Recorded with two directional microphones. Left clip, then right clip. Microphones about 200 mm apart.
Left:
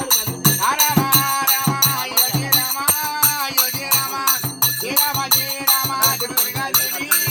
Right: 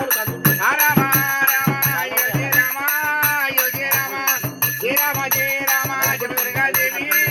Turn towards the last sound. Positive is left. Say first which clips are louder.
# right 1 dB
turn(degrees=50)  # may be behind; listen again after turning